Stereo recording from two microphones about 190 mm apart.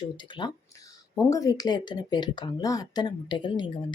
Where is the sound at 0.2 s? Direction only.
25° left (ahead or behind).